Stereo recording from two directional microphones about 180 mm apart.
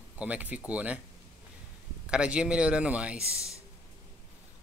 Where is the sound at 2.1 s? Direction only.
5° right (ahead or behind).